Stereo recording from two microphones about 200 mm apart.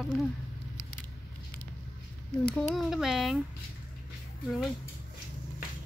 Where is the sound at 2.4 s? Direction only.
Centre (ahead or behind).